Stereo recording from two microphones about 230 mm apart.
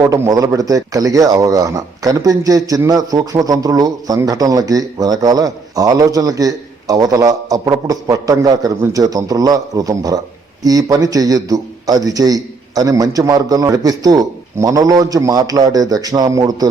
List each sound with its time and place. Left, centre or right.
0.0 s speech: centre